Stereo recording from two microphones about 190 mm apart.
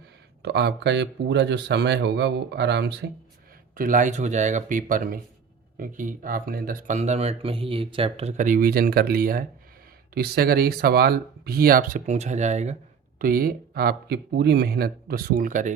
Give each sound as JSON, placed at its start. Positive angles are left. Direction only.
{"t": 0.4, "sound": "speech", "side_deg": -60}
{"t": 3.8, "sound": "speech", "side_deg": -45}
{"t": 13.1, "sound": "speech", "side_deg": -50}